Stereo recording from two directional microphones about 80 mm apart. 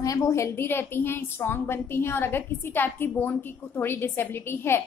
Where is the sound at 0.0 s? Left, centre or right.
Left.